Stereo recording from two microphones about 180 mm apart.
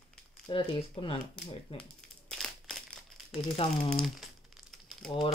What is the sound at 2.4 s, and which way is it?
Crumpling, centre (ahead or behind).